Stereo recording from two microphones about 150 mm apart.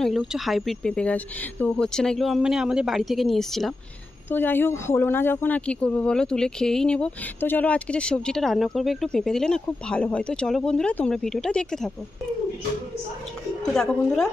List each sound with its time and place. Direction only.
0.0 s speech: centre (ahead or behind)
4.3 s speech: 15° left (ahead or behind)
13.7 s speech: 5° left (ahead or behind)